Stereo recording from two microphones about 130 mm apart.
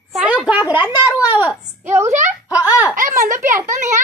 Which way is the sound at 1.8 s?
65° right (ahead or behind).